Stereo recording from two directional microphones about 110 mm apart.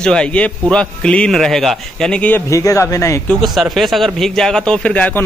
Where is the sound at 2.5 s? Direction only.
30° left (ahead or behind).